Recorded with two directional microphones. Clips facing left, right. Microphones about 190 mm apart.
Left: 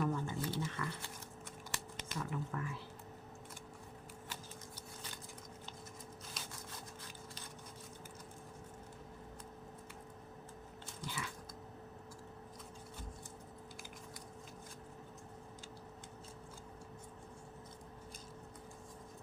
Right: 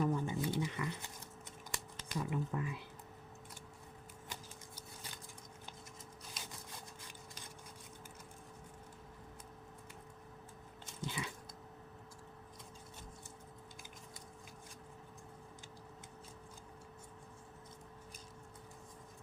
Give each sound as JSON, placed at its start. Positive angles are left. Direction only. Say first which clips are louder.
{"t": 0.0, "sound": "a sound", "louder": "right 2 dB", "side_deg": -15}
{"t": 1.7, "sound": "speech", "louder": "right 2 dB", "side_deg": -15}
{"t": 11.0, "sound": "biting", "louder": "right 3 dB", "side_deg": -20}